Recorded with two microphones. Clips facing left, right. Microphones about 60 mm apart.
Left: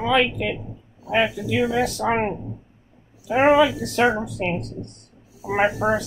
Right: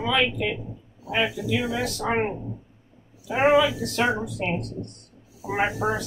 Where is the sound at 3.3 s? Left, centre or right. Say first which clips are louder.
Left 3 dB; left.